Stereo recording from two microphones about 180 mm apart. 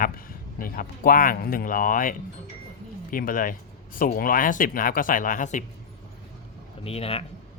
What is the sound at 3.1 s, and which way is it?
Speech, 50° left (ahead or behind).